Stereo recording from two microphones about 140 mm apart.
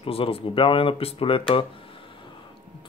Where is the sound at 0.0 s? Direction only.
40° left (ahead or behind).